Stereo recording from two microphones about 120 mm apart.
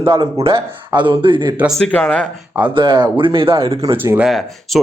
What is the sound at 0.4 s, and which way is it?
Speech, 45° right (ahead or behind).